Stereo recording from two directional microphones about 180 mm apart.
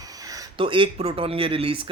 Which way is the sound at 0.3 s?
25° right (ahead or behind).